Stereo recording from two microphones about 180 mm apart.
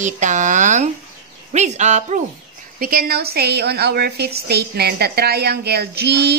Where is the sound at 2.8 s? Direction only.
55° right (ahead or behind).